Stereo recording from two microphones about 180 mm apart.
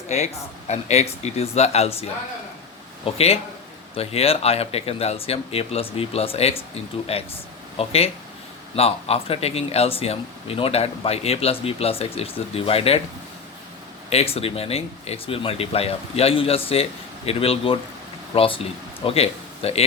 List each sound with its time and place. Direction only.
0.1 s speech: 40° left (ahead or behind)
3.9 s speech: 35° left (ahead or behind)
14.1 s speech: 35° left (ahead or behind)